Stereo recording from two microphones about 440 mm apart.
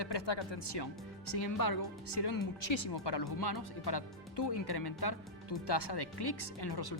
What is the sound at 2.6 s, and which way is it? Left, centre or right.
Speech, left.